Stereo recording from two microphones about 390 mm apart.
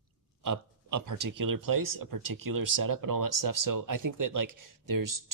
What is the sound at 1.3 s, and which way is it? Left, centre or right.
Speech, right.